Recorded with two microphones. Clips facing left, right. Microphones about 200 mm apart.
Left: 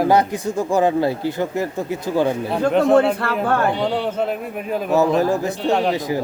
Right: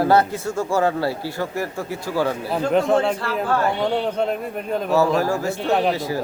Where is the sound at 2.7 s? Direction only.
Centre (ahead or behind).